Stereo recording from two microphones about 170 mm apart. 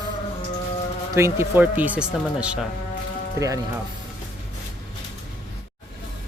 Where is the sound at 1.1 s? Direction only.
15° right (ahead or behind).